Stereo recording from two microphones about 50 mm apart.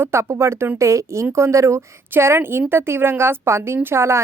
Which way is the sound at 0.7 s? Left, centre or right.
Right.